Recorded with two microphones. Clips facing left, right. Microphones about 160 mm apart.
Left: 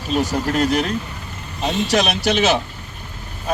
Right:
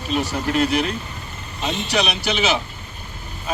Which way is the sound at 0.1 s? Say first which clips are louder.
Left 2 dB; 40° left (ahead or behind).